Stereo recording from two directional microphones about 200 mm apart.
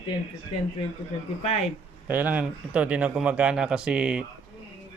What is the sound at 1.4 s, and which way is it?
Speech, 35° left (ahead or behind).